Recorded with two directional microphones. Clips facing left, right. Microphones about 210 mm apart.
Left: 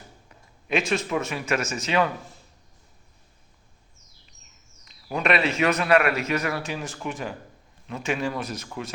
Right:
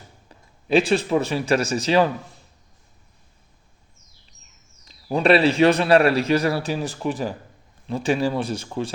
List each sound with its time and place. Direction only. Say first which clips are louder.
0.3 s speech: right 6 dB; 35° right (ahead or behind)
4.9 s a man's voice: right 7 dB; 30° right (ahead or behind)